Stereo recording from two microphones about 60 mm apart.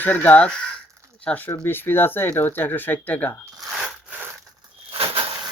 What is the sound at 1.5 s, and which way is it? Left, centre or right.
Speech, left.